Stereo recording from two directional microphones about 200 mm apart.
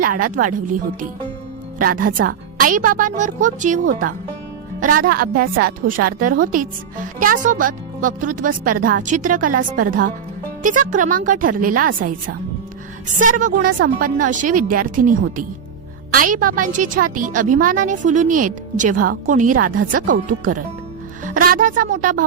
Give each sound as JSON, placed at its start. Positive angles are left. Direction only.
{"t": 0.0, "sound": "a woman's voice", "side_deg": -45}
{"t": 1.8, "sound": "a woman's voice", "side_deg": -45}
{"t": 4.8, "sound": "a woman's voice", "side_deg": -45}